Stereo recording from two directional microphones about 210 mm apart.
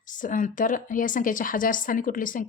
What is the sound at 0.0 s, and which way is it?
A woman's voice, 40° left (ahead or behind).